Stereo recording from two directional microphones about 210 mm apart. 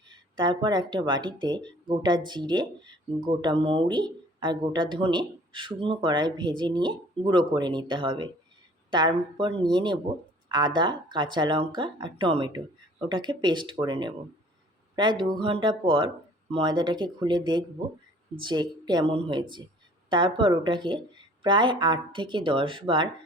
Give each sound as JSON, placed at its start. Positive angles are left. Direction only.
{"t": 0.3, "sound": "speech", "side_deg": -20}